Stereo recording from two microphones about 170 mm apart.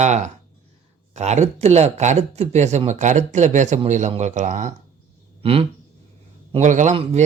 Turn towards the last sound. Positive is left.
turn(degrees=-40)  # may be behind; listen again after turning